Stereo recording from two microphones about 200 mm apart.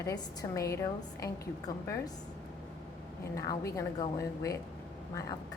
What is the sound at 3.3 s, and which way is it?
A woman's voice, 15° left (ahead or behind).